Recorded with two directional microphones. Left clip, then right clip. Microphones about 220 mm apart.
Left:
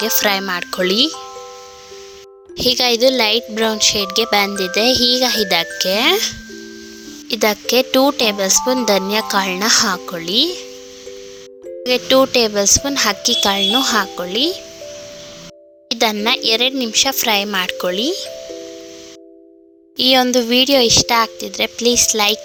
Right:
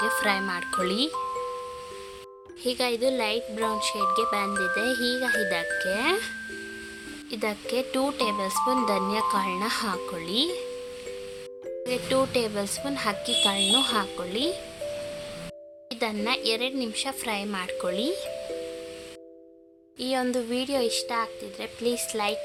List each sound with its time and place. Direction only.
0.0 s speech: 30° left (ahead or behind)
2.6 s speech: 35° left (ahead or behind)
11.8 s speech: 30° left (ahead or behind)
15.9 s speech: 35° left (ahead or behind)
20.0 s speech: 35° left (ahead or behind)